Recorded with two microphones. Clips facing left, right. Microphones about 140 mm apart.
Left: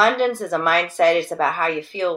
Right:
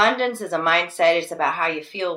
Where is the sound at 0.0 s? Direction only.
25° right (ahead or behind).